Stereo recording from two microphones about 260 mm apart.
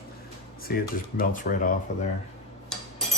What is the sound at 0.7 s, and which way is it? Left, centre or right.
Speech, left.